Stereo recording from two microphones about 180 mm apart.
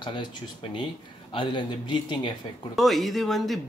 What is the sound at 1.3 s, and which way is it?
Speech, 25° left (ahead or behind).